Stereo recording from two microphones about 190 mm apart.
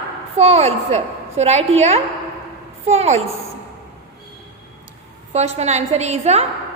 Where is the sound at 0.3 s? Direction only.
35° right (ahead or behind).